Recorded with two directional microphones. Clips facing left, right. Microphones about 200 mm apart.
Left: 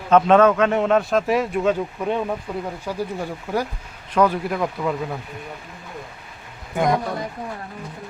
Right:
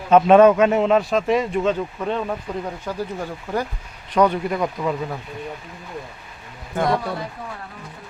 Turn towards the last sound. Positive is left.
turn(degrees=15)  # may be behind; listen again after turning